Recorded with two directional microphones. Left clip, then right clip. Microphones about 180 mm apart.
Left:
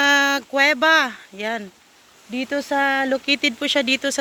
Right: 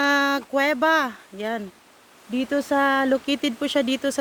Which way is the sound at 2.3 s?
20° right (ahead or behind).